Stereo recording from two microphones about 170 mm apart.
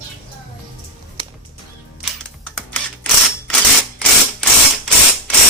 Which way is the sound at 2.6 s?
5° left (ahead or behind).